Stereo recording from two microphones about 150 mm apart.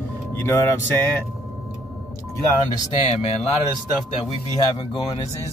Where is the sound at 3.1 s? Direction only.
45° left (ahead or behind).